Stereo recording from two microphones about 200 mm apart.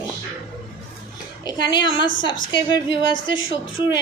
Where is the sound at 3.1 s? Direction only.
75° left (ahead or behind).